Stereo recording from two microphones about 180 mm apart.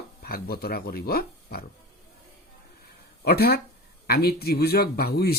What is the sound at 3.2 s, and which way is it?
Speech, 60° left (ahead or behind).